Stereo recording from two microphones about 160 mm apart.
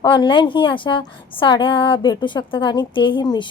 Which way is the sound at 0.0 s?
30° left (ahead or behind).